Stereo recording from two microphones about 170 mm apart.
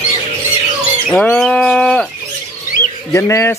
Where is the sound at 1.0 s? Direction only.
5° left (ahead or behind).